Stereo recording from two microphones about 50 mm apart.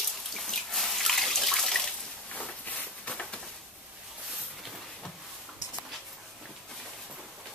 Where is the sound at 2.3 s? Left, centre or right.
Left.